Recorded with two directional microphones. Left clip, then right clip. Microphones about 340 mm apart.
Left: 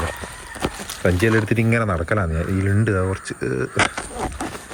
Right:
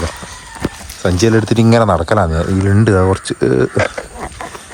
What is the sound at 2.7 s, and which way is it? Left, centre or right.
Speech, centre.